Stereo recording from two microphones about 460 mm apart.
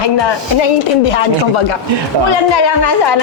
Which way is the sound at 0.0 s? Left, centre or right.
Left.